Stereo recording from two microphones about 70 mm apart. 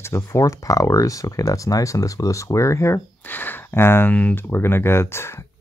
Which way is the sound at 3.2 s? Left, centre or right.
Left.